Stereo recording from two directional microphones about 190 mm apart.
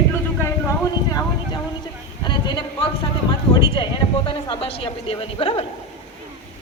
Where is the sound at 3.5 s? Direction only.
25° left (ahead or behind).